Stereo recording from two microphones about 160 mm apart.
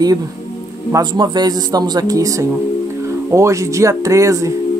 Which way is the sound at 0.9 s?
25° right (ahead or behind).